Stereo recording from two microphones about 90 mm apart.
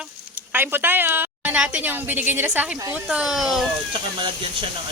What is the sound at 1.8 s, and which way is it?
Speech, 20° right (ahead or behind).